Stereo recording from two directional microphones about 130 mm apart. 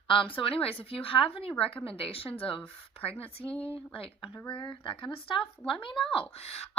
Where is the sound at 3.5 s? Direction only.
10° left (ahead or behind).